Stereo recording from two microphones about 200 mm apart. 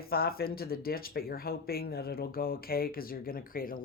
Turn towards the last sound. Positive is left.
turn(degrees=45)  # may be behind; listen again after turning